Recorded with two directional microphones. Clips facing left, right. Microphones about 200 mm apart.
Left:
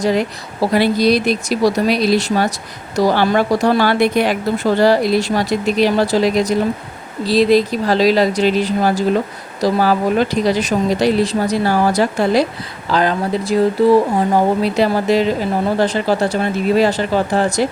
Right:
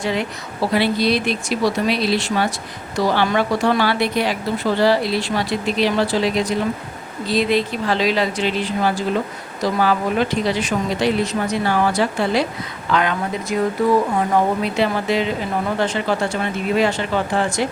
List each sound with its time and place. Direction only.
0.0 s a woman's voice: 40° left (ahead or behind)